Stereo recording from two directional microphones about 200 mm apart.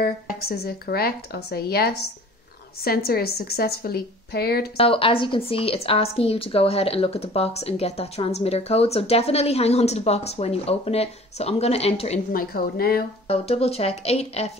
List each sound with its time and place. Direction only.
0.0 s speech: 50° left (ahead or behind)
4.7 s a woman's voice: 25° left (ahead or behind)
12.3 s speech: 45° left (ahead or behind)
13.3 s a woman's voice: 30° left (ahead or behind)